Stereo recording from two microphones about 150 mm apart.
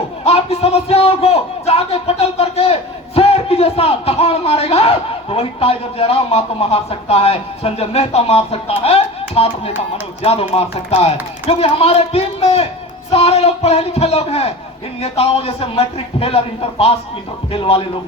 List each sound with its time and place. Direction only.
0.3 s a man's voice: 40° left (ahead or behind)